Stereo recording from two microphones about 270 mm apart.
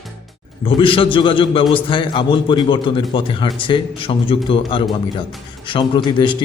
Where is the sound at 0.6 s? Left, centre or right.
Centre.